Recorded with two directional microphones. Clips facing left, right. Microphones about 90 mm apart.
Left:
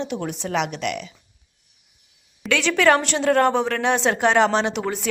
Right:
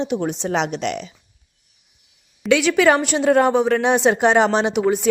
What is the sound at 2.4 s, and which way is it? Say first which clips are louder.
A woman's voice: right 3 dB; 10° right (ahead or behind).